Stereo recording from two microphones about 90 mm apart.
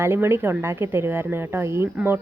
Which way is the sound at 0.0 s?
25° right (ahead or behind).